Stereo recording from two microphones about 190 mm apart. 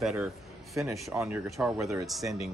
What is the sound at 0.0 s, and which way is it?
A man's voice, 5° right (ahead or behind).